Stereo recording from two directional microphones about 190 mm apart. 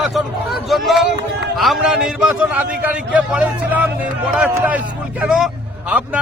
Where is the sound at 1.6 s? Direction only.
Centre (ahead or behind).